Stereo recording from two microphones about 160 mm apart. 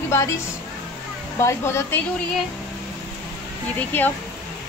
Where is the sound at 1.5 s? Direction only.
15° left (ahead or behind).